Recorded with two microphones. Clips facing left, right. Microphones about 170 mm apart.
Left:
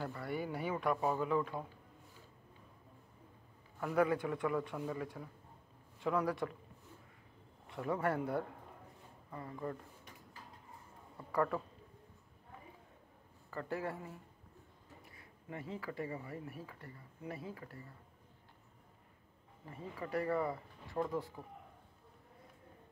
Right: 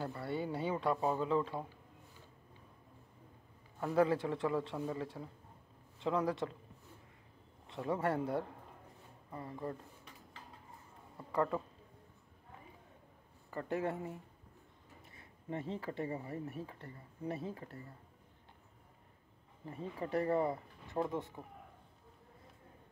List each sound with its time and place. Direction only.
0.0 s a sound: 25° right (ahead or behind)
3.8 s speech: 30° right (ahead or behind)
7.6 s a man's voice: 25° right (ahead or behind)
9.3 s speech: 30° right (ahead or behind)
11.3 s speech: 25° right (ahead or behind)
13.5 s speech: 20° right (ahead or behind)
19.6 s speech: 25° right (ahead or behind)